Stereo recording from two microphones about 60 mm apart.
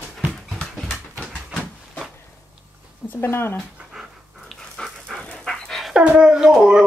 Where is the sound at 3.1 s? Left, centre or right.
Left.